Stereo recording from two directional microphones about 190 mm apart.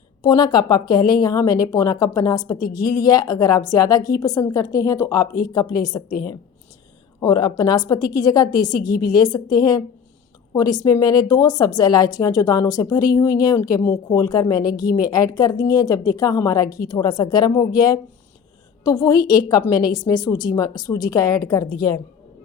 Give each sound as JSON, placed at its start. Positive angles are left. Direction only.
{"t": 0.2, "sound": "a woman's voice", "side_deg": 20}
{"t": 7.2, "sound": "a woman's voice", "side_deg": 20}